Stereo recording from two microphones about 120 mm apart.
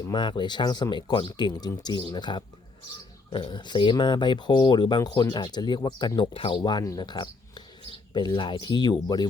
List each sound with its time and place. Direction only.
0.1 s speech: 40° left (ahead or behind)